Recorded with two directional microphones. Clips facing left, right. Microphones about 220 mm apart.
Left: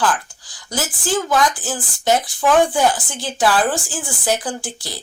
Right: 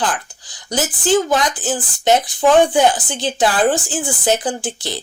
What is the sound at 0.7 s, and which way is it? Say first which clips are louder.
Speech: right 6 dB; 20° right (ahead or behind).